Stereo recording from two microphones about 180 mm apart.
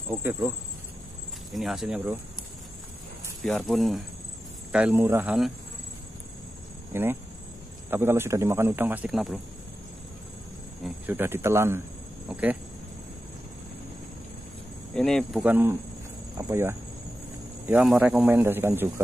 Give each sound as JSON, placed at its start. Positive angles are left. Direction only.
{"t": 0.1, "sound": "a man's voice", "side_deg": -10}
{"t": 1.5, "sound": "speech", "side_deg": 0}
{"t": 3.4, "sound": "a man's voice", "side_deg": 0}
{"t": 6.9, "sound": "a man's voice", "side_deg": -10}
{"t": 11.1, "sound": "a man's voice", "side_deg": -10}
{"t": 15.0, "sound": "speech", "side_deg": 0}
{"t": 15.4, "sound": "a man's voice", "side_deg": -10}
{"t": 17.6, "sound": "a man's voice", "side_deg": -5}